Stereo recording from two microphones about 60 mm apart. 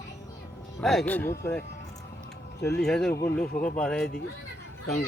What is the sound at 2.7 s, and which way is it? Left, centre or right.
Speech, centre.